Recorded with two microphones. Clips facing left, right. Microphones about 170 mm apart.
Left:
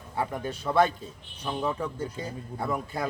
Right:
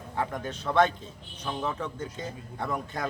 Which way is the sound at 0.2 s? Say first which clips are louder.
Left 1 dB; 10° left (ahead or behind).